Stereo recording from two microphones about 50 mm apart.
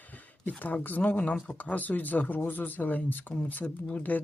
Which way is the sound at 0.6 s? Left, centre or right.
Left.